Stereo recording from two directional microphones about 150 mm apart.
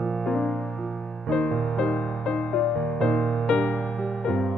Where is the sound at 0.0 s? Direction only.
5° left (ahead or behind).